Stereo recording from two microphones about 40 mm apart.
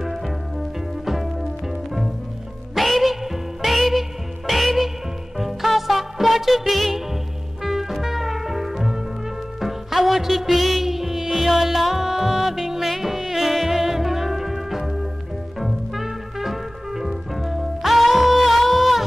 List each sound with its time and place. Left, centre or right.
0.0 s music: centre
2.7 s music: centre